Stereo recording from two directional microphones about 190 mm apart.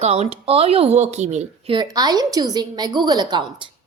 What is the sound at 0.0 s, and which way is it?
A woman's voice, 35° right (ahead or behind).